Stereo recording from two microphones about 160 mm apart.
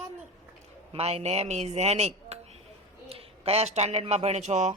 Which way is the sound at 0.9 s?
40° right (ahead or behind).